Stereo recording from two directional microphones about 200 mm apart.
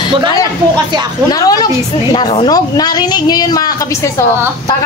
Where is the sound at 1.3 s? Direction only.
20° left (ahead or behind).